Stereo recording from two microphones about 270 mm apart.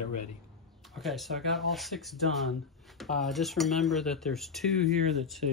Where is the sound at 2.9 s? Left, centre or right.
Centre.